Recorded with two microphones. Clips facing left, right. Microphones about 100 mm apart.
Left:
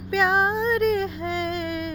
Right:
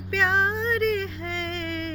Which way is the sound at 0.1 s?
15° left (ahead or behind).